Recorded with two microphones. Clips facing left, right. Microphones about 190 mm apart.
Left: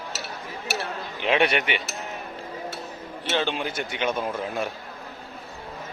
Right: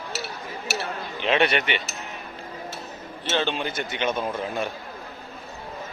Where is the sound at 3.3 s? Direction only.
10° left (ahead or behind).